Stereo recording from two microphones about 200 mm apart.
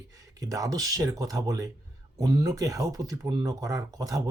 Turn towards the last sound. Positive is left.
turn(degrees=-15)  # may be behind; listen again after turning